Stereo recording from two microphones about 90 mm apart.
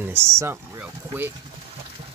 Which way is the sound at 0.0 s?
25° right (ahead or behind).